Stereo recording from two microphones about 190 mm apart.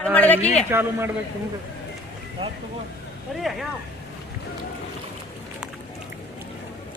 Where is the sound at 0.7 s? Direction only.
10° right (ahead or behind).